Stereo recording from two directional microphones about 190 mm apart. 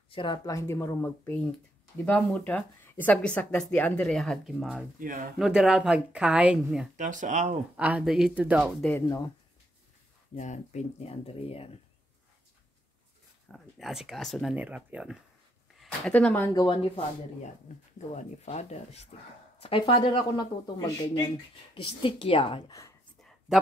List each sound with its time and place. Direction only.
0.1 s speech: 25° left (ahead or behind); by 4.8 s centre (ahead or behind)
4.9 s speech: 45° right (ahead or behind)
5.4 s speech: centre (ahead or behind)
7.0 s speech: 40° right (ahead or behind)
7.7 s speech: 5° right (ahead or behind)
9.0 s speech: 20° left (ahead or behind)
10.3 s speech: 40° left (ahead or behind)
13.5 s speech: centre (ahead or behind)
15.8 s speech: 5° left (ahead or behind)
16.5 s speech: 25° left (ahead or behind)
18.1 s speech: 35° left (ahead or behind)